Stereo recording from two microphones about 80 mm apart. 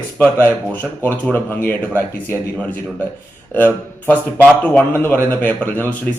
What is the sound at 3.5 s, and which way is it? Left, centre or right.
Speech, left.